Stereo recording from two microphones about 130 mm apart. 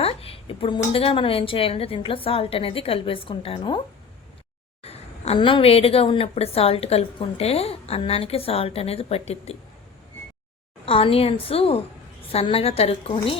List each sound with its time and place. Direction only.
0.0 s a woman's voice: 50° left (ahead or behind)
4.8 s a sound: 50° left (ahead or behind)
5.4 s a woman's voice: 40° left (ahead or behind)
10.8 s a woman's voice: 45° left (ahead or behind)